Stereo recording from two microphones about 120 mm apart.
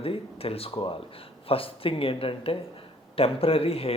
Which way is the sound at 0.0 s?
50° left (ahead or behind).